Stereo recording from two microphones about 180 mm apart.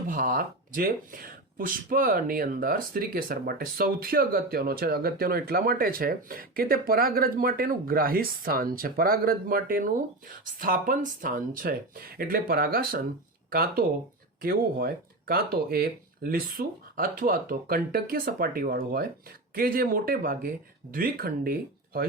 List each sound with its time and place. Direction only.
0.1 s speech: 50° right (ahead or behind)